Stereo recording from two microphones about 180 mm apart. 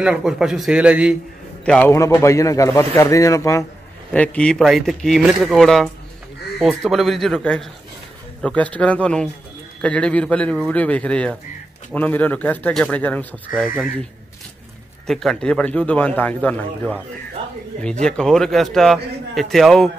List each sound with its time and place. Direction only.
0.0 s a man's voice: 5° right (ahead or behind)
1.6 s a man's voice: 5° left (ahead or behind)
15.0 s a man's voice: centre (ahead or behind)
18.0 s a man's voice: 5° left (ahead or behind)